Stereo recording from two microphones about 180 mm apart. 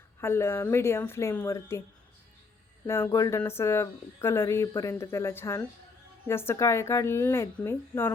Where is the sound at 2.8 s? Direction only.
15° left (ahead or behind).